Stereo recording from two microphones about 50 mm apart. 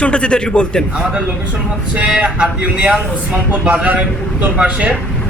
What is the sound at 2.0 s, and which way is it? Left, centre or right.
A man's voice, right.